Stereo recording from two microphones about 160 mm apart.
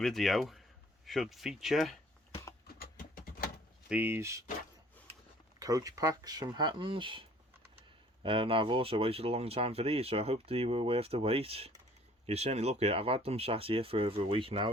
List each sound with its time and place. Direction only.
0.0 s speech: centre (ahead or behind)
2.7 s a sound: 65° left (ahead or behind)
3.8 s speech: 10° right (ahead or behind)
5.5 s speech: 20° right (ahead or behind)